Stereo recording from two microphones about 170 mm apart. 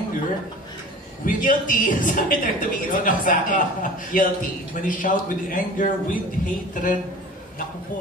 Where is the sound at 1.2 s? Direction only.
55° left (ahead or behind).